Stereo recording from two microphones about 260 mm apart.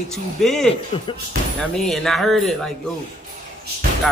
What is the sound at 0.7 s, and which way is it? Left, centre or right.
Speech, left.